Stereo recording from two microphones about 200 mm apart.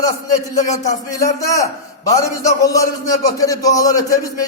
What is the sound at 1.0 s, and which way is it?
A man's voice, 15° left (ahead or behind).